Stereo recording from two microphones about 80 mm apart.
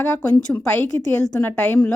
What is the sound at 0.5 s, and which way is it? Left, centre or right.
Speech, centre.